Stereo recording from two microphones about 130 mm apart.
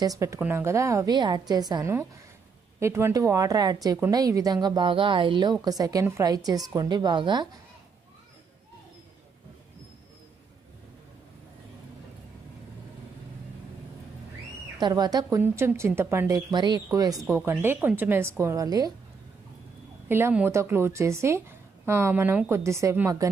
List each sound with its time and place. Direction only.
0.0 s a woman's voice: 25° right (ahead or behind)
1.8 s a woman's voice: 20° right (ahead or behind); by 7.4 s 35° right (ahead or behind)
14.8 s a woman's voice: 30° right (ahead or behind)
17.4 s speech: 15° right (ahead or behind)
18.4 s a woman's voice: 25° right (ahead or behind)
20.1 s a woman's voice: 15° right (ahead or behind)